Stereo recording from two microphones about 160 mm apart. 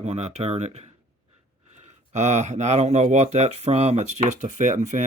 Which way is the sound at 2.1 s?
45° right (ahead or behind).